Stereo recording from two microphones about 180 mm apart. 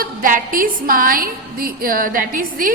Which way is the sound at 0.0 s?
50° right (ahead or behind).